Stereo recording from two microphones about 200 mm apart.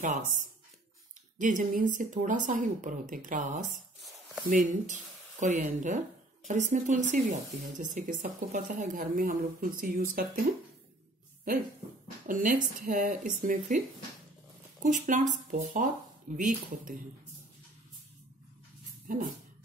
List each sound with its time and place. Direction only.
0.0 s speech: 40° right (ahead or behind)
4.0 s a sound: centre (ahead or behind)
4.5 s speech: 40° right (ahead or behind)
12.3 s speech: 40° right (ahead or behind)